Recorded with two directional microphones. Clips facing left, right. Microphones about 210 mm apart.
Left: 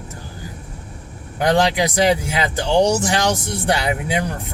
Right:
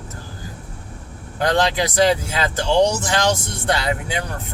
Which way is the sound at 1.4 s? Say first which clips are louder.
Left 2 dB; 15° left (ahead or behind).